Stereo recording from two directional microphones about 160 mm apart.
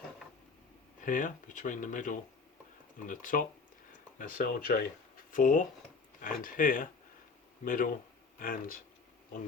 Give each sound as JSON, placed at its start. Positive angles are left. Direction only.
{"t": 1.0, "sound": "speech", "side_deg": 55}